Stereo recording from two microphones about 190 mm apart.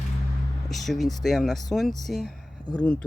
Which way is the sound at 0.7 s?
Centre (ahead or behind).